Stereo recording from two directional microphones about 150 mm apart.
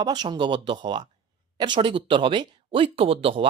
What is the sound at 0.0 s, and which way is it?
Speech, 30° right (ahead or behind).